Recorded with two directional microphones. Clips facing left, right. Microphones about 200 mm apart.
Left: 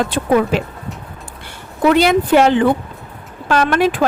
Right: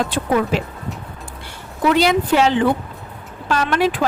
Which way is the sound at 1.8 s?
55° left (ahead or behind).